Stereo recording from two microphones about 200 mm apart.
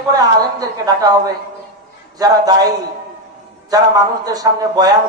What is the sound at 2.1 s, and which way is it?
Speech, 20° right (ahead or behind).